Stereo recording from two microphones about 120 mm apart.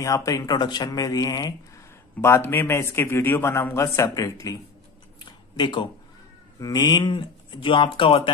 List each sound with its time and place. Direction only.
0.0 s speech: 25° left (ahead or behind)
2.2 s a man's voice: 20° left (ahead or behind)
5.2 s a sound: 40° left (ahead or behind)
6.6 s speech: 30° left (ahead or behind)